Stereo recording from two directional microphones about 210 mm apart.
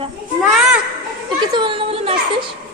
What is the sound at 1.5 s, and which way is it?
Children playing, 25° right (ahead or behind).